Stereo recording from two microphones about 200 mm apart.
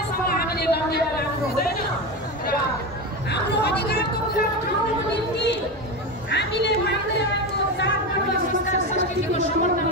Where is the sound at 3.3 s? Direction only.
55° left (ahead or behind).